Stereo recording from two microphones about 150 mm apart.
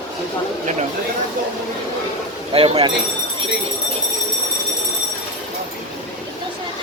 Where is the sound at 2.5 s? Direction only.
40° right (ahead or behind).